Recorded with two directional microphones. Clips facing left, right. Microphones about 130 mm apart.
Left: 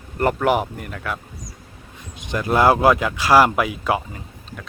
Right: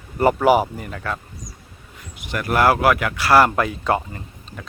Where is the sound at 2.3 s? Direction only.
20° left (ahead or behind).